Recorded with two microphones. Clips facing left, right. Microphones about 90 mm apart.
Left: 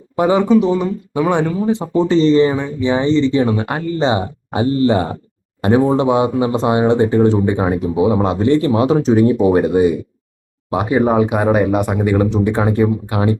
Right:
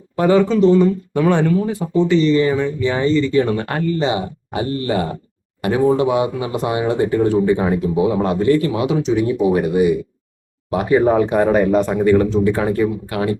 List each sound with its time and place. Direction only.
0.2 s speech: 15° left (ahead or behind)
1.9 s speech: 35° left (ahead or behind); by 3.8 s 15° left (ahead or behind)
3.9 s speech: 30° left (ahead or behind)